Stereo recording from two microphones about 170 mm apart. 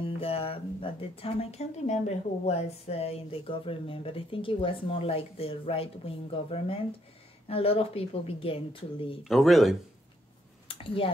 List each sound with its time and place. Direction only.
0.0 s speech: 35° left (ahead or behind)
9.2 s speech: centre (ahead or behind)
10.7 s a sound: 30° left (ahead or behind)